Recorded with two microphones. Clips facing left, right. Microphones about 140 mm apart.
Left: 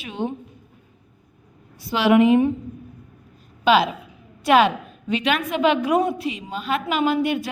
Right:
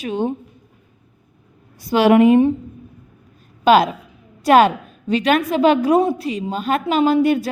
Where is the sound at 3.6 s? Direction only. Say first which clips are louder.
Right 4 dB; 45° right (ahead or behind).